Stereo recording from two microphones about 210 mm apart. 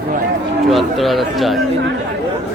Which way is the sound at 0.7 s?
Centre (ahead or behind).